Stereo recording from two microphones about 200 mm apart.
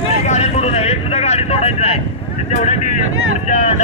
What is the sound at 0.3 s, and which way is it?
Vehicle, 30° left (ahead or behind).